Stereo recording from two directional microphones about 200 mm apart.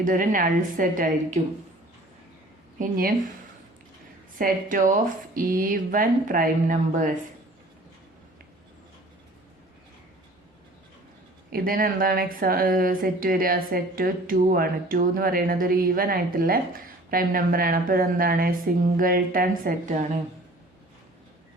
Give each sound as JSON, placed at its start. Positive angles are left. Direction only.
{"t": 0.0, "sound": "a woman's voice", "side_deg": -40}
{"t": 2.7, "sound": "speech", "side_deg": -45}
{"t": 4.4, "sound": "speech", "side_deg": -45}
{"t": 11.5, "sound": "speech", "side_deg": -45}